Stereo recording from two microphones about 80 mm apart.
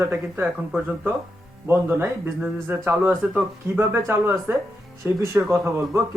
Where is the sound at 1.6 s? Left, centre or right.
Right.